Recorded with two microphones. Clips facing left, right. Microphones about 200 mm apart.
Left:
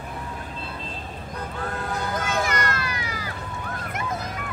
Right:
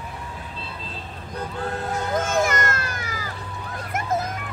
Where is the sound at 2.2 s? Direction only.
45° right (ahead or behind).